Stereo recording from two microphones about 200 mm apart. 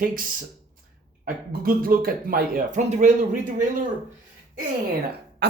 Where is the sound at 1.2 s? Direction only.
45° right (ahead or behind).